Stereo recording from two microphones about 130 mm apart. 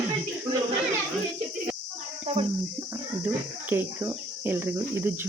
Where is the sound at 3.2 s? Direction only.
15° right (ahead or behind).